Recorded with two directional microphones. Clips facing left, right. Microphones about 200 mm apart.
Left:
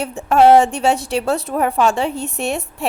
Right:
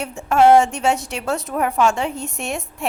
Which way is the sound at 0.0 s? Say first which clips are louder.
Left 2 dB; 35° left (ahead or behind).